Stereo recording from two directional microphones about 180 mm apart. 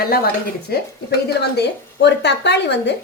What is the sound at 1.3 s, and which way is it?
A woman's voice, 70° left (ahead or behind).